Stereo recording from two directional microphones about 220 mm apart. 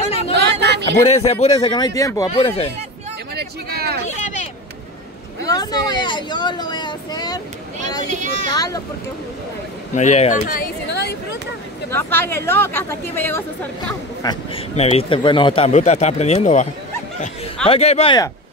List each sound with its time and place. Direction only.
0.6 s a sound: 50° right (ahead or behind)
1.0 s a man's voice: 30° left (ahead or behind)
3.3 s a sound: 45° right (ahead or behind)
5.5 s a man's voice: 15° left (ahead or behind)
8.1 s speech: 35° right (ahead or behind)
8.5 s speech: 15° left (ahead or behind)
9.9 s speech: 30° left (ahead or behind); by 11.1 s 50° left (ahead or behind)
11.9 s speech: 10° left (ahead or behind)
14.2 s a man's voice: 20° left (ahead or behind)
17.6 s a man's voice: 30° left (ahead or behind)